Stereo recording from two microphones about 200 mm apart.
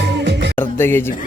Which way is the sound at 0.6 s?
10° left (ahead or behind).